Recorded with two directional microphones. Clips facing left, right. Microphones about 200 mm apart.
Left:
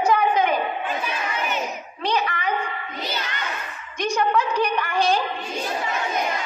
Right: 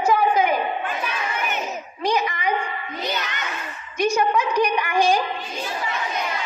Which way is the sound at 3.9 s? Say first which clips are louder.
Right 2 dB; 15° right (ahead or behind).